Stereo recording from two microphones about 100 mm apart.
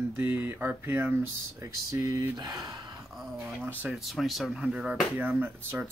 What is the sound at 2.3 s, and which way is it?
Speech, 45° right (ahead or behind).